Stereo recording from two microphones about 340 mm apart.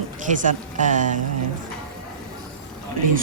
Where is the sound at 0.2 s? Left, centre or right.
Right.